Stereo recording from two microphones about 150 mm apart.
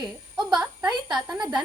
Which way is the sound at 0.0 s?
5° right (ahead or behind).